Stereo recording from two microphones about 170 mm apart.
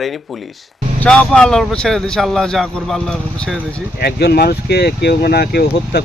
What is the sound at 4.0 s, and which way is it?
Speech, 70° left (ahead or behind).